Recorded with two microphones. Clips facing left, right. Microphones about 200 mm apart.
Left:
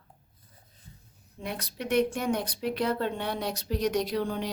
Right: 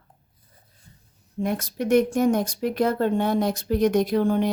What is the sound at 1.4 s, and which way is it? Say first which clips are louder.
Speech: right 10 dB; 45° right (ahead or behind).